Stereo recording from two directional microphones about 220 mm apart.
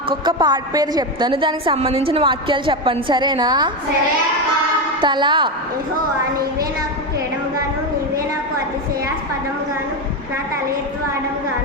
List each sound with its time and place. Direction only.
0.1 s a woman's voice: 20° right (ahead or behind)
4.9 s a woman's voice: 20° right (ahead or behind)